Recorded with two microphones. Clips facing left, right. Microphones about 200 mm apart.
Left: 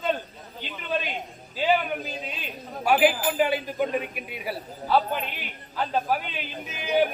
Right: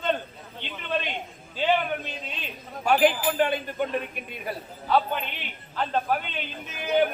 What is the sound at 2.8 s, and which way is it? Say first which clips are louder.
A man's voice: even; 5° left (ahead or behind).